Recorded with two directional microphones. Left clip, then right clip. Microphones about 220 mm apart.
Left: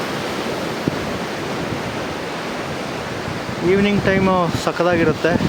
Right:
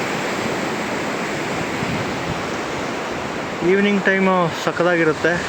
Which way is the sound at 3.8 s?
Centre (ahead or behind).